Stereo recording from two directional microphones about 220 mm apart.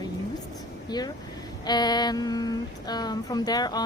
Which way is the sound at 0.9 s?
20° left (ahead or behind).